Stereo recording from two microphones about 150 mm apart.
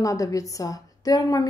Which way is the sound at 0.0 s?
20° left (ahead or behind).